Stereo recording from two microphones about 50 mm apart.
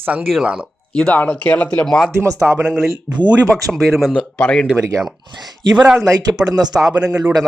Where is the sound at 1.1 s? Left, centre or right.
Left.